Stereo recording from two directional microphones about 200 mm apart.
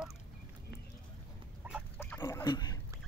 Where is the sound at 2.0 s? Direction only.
10° left (ahead or behind).